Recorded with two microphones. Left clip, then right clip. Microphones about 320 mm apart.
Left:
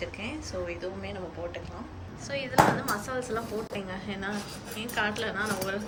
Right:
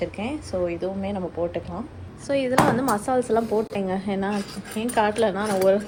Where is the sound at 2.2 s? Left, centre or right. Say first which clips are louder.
Right 4 dB; centre.